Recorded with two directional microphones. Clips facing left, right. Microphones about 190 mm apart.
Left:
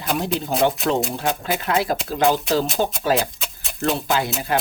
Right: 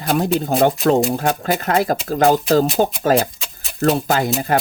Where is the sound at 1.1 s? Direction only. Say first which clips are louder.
Right 4 dB; 45° right (ahead or behind).